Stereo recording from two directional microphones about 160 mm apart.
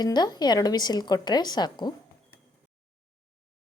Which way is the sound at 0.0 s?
25° left (ahead or behind).